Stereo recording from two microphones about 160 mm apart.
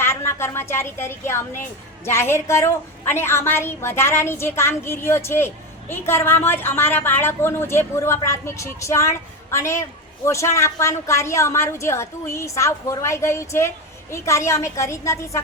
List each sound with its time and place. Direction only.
0.0 s a woman's voice: 15° left (ahead or behind)